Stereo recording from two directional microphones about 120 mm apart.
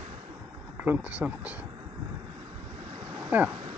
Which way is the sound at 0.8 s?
10° right (ahead or behind).